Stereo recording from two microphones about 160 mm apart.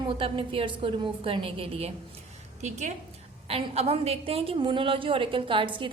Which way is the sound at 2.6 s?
45° right (ahead or behind).